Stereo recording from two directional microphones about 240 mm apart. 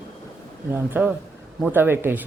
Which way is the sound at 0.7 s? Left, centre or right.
Centre.